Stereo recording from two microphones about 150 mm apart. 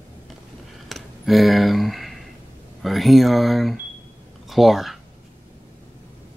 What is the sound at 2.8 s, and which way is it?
Speech, centre (ahead or behind).